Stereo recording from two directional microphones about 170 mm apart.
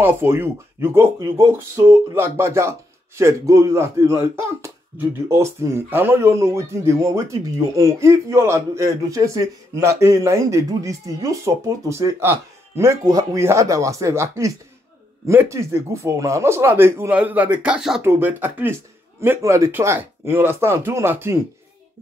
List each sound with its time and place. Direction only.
0.0 s speech: 15° right (ahead or behind)
2.1 s speech: 15° right (ahead or behind)